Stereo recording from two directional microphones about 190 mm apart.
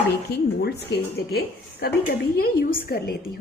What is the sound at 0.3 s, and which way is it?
A woman's voice, 60° left (ahead or behind).